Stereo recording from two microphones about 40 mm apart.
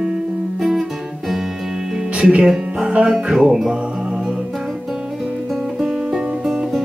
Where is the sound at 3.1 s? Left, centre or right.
Centre.